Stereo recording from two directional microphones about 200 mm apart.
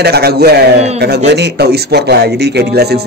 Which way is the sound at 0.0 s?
55° right (ahead or behind).